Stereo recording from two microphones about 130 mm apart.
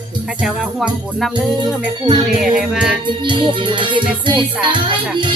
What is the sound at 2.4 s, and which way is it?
Music, 5° right (ahead or behind).